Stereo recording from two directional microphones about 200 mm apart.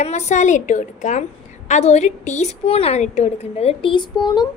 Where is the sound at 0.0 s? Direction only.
35° left (ahead or behind).